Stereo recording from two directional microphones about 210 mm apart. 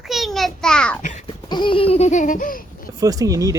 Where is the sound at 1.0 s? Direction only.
35° left (ahead or behind).